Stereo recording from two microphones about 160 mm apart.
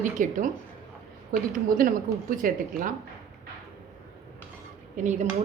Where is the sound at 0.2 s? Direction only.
55° right (ahead or behind).